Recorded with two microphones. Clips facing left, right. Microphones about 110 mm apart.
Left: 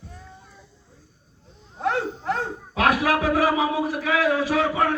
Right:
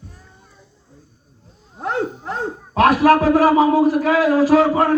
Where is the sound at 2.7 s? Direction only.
45° right (ahead or behind).